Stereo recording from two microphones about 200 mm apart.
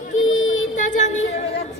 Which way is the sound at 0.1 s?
80° left.